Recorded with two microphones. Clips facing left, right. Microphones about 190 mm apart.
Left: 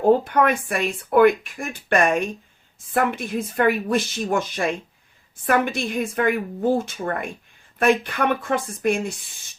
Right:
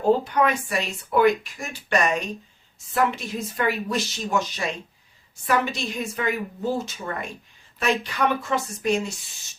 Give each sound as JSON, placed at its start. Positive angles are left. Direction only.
{"t": 0.1, "sound": "speech", "side_deg": 55}